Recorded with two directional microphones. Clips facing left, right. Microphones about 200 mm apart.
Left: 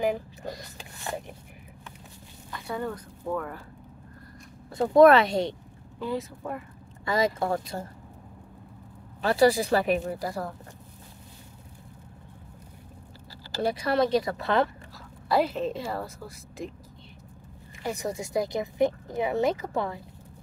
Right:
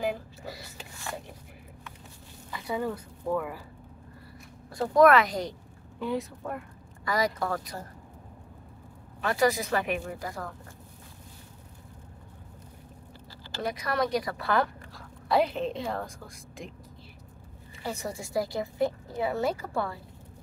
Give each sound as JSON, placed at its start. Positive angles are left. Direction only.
{"t": 0.0, "sound": "a sound", "side_deg": 20}
{"t": 0.5, "sound": "a sound", "side_deg": -5}
{"t": 2.5, "sound": "speech", "side_deg": -5}
{"t": 4.6, "sound": "speech", "side_deg": 25}
{"t": 5.9, "sound": "a woman's voice", "side_deg": 0}
{"t": 7.1, "sound": "speech", "side_deg": 25}
{"t": 9.2, "sound": "speech", "side_deg": 30}
{"t": 13.5, "sound": "speech", "side_deg": 30}
{"t": 15.2, "sound": "a woman's voice", "side_deg": 0}
{"t": 17.8, "sound": "a woman's voice", "side_deg": 15}